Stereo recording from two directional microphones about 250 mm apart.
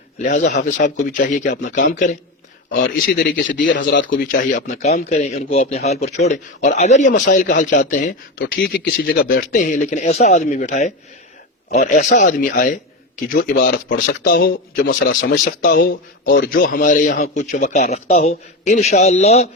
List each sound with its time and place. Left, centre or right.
0.2 s speech: left
3.2 s speech: left
4.3 s a man's voice: left